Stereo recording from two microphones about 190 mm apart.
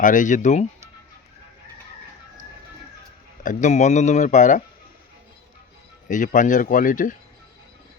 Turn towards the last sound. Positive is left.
turn(degrees=45)  # may be behind; listen again after turning